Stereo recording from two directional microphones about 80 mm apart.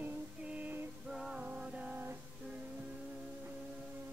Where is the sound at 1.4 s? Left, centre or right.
Centre.